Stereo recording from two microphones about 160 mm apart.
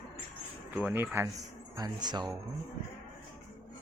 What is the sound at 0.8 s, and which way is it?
Speech, 10° right (ahead or behind).